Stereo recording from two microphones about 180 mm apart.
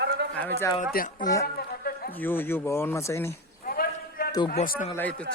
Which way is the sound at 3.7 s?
55° left (ahead or behind).